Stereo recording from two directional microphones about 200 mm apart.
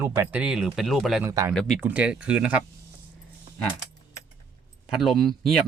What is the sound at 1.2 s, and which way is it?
Speech, 15° right (ahead or behind).